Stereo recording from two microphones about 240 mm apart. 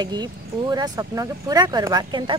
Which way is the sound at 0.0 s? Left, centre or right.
Centre.